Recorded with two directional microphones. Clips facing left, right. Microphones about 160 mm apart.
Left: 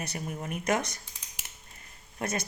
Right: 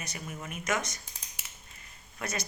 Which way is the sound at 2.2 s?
50° left (ahead or behind).